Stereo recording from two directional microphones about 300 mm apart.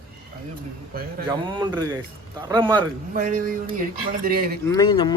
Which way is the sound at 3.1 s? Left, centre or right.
Right.